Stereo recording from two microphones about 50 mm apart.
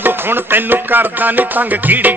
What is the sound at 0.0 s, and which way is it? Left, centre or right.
Music, right.